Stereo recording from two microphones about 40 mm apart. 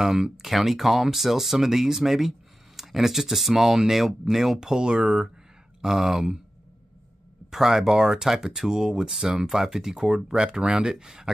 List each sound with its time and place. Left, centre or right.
0.0 s speech: centre
7.5 s speech: centre